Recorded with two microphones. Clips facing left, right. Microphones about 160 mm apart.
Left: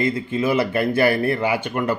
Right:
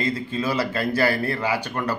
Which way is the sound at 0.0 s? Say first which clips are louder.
Left 4 dB; 25° left (ahead or behind).